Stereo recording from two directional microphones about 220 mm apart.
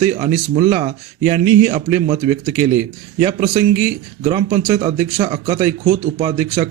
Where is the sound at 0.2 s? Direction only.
25° right (ahead or behind).